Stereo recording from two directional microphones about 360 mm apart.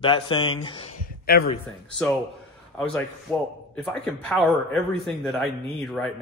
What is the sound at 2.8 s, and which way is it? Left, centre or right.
A man's voice, centre.